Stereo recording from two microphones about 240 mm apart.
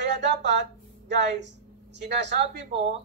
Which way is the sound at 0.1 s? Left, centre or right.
Right.